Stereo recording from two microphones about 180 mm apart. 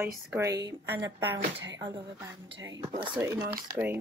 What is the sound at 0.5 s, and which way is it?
Speech, 70° right (ahead or behind).